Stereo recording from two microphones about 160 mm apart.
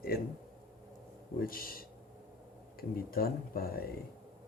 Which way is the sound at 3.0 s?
70° left (ahead or behind).